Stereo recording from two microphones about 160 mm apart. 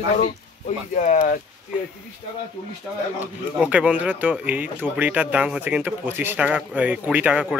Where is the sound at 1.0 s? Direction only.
50° left (ahead or behind).